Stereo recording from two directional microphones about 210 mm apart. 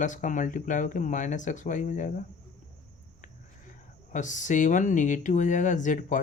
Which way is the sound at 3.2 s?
35° left (ahead or behind).